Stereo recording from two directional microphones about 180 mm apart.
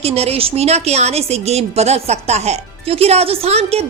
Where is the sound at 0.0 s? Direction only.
35° right (ahead or behind).